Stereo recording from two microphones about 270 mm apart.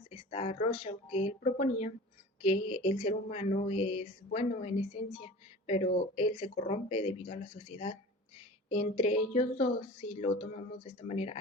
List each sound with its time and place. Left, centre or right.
0.1 s speech: left